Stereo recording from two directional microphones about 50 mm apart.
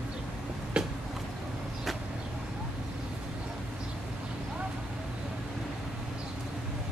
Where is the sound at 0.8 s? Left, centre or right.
Centre.